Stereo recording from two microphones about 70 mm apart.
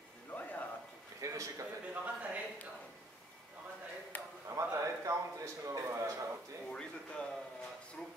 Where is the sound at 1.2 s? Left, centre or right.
Right.